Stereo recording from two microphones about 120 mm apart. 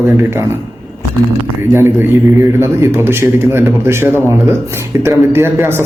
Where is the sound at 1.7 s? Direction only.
20° right (ahead or behind).